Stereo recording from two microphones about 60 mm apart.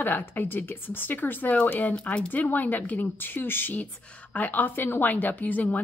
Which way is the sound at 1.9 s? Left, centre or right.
Centre.